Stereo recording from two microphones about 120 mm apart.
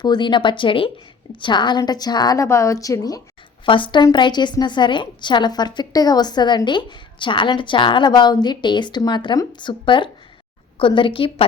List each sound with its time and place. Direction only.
0.0 s a woman's voice: 40° left (ahead or behind)
3.7 s a woman's voice: 40° left (ahead or behind)